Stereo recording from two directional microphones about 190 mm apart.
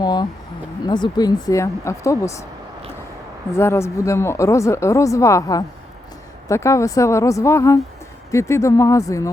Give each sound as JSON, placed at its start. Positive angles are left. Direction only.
{"t": 0.0, "sound": "a sound", "side_deg": 20}
{"t": 0.9, "sound": "speech", "side_deg": 20}
{"t": 3.6, "sound": "speech", "side_deg": 15}